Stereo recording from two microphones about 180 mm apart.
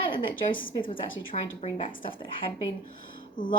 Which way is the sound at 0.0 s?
25° left (ahead or behind).